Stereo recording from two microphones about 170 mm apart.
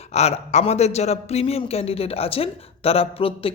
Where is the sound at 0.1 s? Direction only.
40° left (ahead or behind).